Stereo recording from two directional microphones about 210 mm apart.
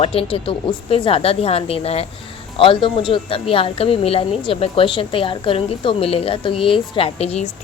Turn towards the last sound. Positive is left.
turn(degrees=30)  # may be behind; listen again after turning